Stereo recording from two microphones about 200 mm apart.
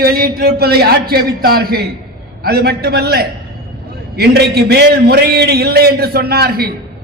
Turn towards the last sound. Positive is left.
turn(degrees=-50)  # may be behind; listen again after turning